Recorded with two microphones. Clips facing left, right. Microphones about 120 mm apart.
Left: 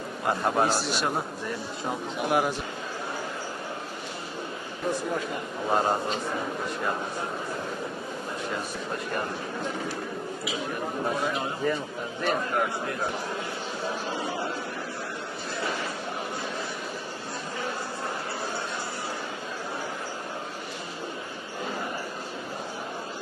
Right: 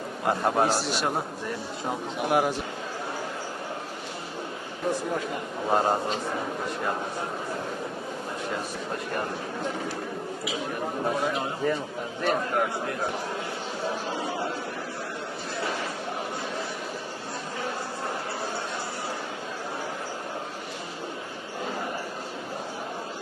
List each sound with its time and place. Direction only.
0.3 s a man's voice: 40° right (ahead or behind)
0.7 s a man's voice: 65° right (ahead or behind)
2.2 s a man's voice: 50° right (ahead or behind)
5.7 s a man's voice: 40° right (ahead or behind)
11.0 s a man's voice: 40° right (ahead or behind)